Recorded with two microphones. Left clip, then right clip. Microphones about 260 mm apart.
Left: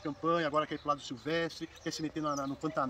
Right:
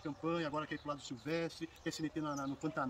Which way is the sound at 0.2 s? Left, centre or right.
Centre.